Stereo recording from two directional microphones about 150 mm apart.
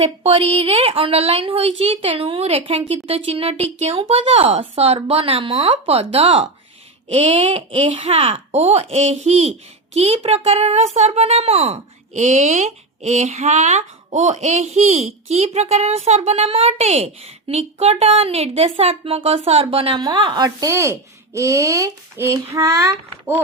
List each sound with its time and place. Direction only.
0.0 s a woman's voice: 40° right (ahead or behind)
12.1 s speech: 50° right (ahead or behind); by 23.3 s 20° right (ahead or behind)